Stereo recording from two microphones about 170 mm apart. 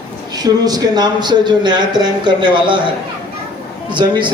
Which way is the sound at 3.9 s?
25° right (ahead or behind).